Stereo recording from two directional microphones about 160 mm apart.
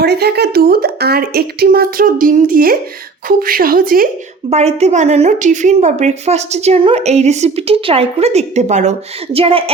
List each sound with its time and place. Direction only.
0.0 s a woman's voice: 90° right; by 4.1 s 65° right (ahead or behind)
4.4 s speech: 45° right (ahead or behind)